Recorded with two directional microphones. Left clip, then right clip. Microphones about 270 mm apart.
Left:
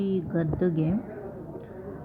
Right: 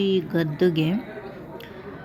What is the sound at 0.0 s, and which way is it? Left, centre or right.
Speech, right.